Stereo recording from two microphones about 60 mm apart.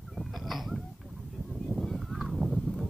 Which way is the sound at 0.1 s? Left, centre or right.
Centre.